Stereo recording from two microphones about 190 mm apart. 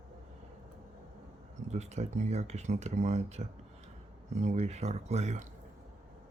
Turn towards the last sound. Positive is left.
turn(degrees=-35)  # may be behind; listen again after turning